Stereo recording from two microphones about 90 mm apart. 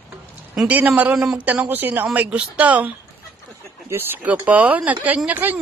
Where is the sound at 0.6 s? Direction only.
15° right (ahead or behind).